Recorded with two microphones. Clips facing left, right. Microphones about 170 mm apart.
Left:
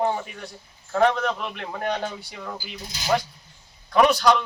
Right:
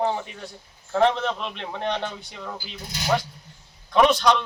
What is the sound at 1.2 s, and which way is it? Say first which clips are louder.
Speech: left 1 dB; 5° left (ahead or behind).